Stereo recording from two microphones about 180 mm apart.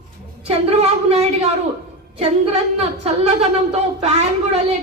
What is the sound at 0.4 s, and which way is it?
Speech, 35° right (ahead or behind).